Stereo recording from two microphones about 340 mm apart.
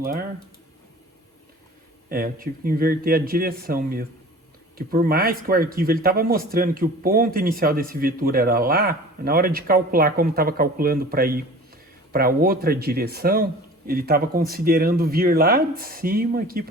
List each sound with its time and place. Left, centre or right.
0.0 s speech: right
2.0 s speech: right